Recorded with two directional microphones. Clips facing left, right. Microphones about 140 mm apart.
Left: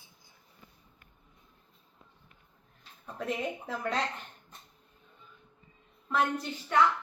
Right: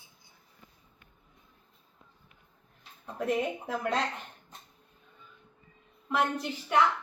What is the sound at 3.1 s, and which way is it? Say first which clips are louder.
Speech: right 4 dB; 5° right (ahead or behind).